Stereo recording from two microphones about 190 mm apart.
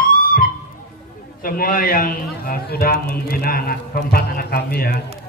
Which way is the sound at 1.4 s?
50° left (ahead or behind).